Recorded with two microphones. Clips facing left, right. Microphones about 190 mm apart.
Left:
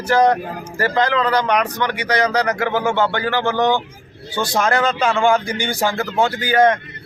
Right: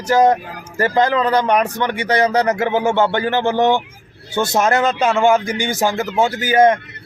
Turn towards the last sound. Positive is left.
turn(degrees=-20)  # may be behind; listen again after turning